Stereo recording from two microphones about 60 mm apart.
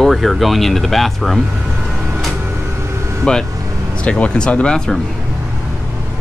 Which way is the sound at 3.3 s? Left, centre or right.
Centre.